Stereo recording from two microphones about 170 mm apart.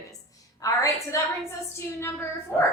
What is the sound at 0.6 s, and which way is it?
A woman's voice, 20° left (ahead or behind).